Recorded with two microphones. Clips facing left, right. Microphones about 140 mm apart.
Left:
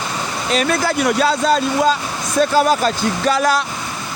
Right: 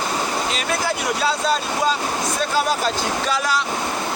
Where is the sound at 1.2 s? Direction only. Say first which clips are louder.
Left 4 dB; 45° left (ahead or behind).